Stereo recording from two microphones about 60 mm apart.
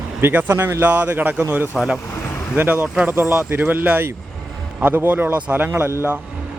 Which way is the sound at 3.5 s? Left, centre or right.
Right.